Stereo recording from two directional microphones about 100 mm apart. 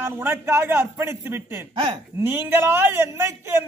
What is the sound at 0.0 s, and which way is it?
A man's voice, 25° right (ahead or behind).